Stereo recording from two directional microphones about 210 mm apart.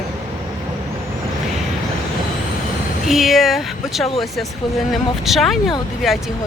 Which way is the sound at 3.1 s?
Centre (ahead or behind).